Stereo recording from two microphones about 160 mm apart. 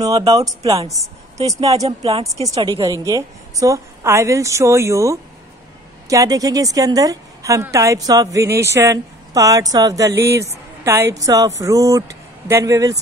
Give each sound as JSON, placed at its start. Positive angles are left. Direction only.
{"t": 0.0, "sound": "a woman's voice", "side_deg": -25}
{"t": 1.9, "sound": "speech", "side_deg": -40}
{"t": 2.4, "sound": "a woman's voice", "side_deg": -25}